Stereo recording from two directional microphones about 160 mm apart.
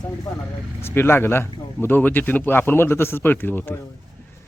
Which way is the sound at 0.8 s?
15° left (ahead or behind).